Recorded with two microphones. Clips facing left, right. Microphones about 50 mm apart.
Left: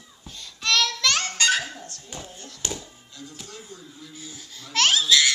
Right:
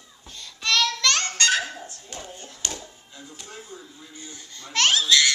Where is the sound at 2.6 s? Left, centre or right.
Centre.